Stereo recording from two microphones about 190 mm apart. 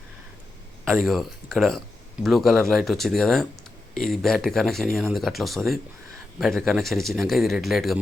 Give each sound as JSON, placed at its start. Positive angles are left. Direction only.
{"t": 0.9, "sound": "speech", "side_deg": 0}